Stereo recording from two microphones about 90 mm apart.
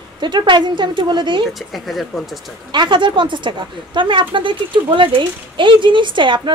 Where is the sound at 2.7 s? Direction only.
60° right (ahead or behind).